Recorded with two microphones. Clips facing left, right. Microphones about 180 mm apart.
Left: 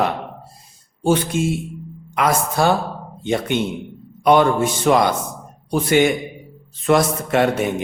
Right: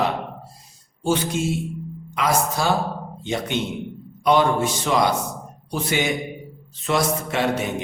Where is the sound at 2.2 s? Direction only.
55° left (ahead or behind).